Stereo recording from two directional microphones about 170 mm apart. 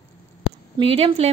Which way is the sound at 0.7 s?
35° right (ahead or behind).